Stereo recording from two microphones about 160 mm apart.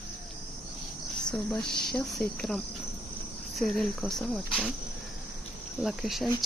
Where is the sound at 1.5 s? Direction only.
5° left (ahead or behind).